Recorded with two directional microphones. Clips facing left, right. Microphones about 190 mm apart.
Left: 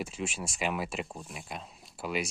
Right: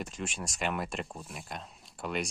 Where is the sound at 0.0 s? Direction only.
5° left (ahead or behind).